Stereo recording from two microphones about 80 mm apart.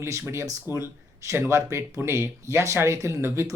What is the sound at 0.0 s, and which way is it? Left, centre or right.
Speech, right.